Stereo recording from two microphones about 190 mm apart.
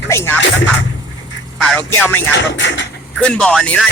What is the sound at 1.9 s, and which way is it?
Speech, 10° left (ahead or behind).